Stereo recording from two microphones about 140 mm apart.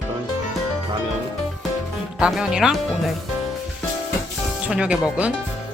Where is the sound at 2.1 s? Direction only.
5° right (ahead or behind).